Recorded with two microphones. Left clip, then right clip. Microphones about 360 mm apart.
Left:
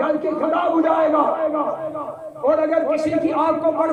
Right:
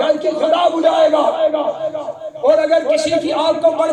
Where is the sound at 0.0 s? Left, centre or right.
Right.